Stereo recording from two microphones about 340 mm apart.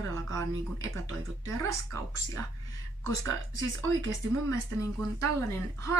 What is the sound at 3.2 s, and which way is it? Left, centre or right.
Speech, right.